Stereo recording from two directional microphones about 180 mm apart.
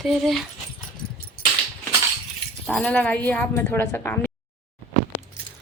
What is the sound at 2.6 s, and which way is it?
Speech, 5° left (ahead or behind).